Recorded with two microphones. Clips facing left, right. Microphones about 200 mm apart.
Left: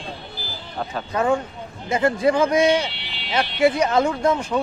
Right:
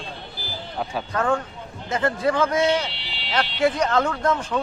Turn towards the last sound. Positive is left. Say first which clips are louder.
# left 3 dB
turn(degrees=10)  # may be behind; listen again after turning